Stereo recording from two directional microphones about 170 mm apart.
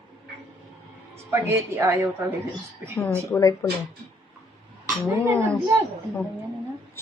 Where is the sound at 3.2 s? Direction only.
20° left (ahead or behind).